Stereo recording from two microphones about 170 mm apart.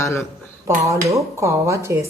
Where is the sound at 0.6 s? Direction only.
15° right (ahead or behind).